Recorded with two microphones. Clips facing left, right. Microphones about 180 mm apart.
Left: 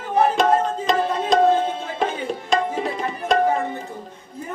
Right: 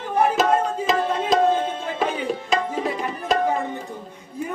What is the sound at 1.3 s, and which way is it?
Tabla, 5° right (ahead or behind).